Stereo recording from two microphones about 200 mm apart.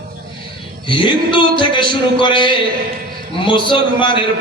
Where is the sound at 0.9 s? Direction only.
25° left (ahead or behind).